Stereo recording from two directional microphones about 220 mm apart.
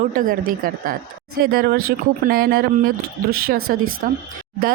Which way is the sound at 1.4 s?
45° right (ahead or behind).